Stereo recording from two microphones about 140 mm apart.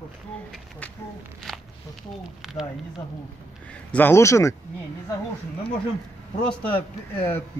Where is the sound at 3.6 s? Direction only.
10° left (ahead or behind).